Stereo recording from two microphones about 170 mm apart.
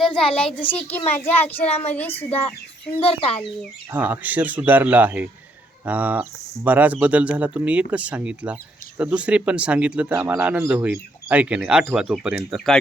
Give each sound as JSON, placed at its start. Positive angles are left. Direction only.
{"t": 0.0, "sound": "a child's voice", "side_deg": 5}
{"t": 3.0, "sound": "speech", "side_deg": 35}
{"t": 3.9, "sound": "speech", "side_deg": -10}